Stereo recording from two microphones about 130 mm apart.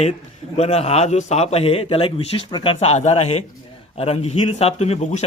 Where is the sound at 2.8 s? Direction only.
55° left (ahead or behind).